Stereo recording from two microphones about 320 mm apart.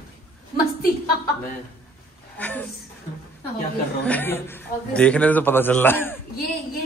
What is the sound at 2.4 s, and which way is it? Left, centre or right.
Speech, centre.